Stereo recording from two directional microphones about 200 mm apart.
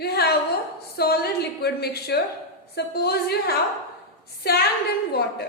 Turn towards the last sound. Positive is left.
turn(degrees=50)  # may be behind; listen again after turning